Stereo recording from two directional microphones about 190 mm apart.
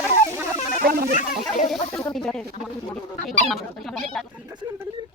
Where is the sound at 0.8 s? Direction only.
55° right (ahead or behind).